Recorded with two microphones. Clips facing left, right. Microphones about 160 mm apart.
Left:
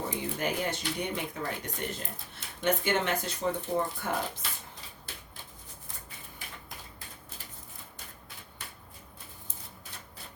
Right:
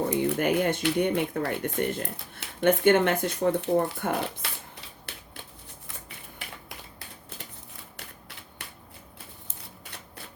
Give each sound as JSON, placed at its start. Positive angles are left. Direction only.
{"t": 0.1, "sound": "speech", "side_deg": -65}
{"t": 6.4, "sound": "typewriter", "side_deg": -70}